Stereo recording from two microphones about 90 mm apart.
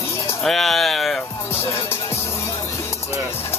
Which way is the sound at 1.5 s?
25° left (ahead or behind).